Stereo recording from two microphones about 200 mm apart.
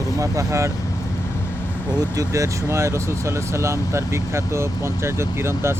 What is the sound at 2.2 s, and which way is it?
Speech, 15° right (ahead or behind).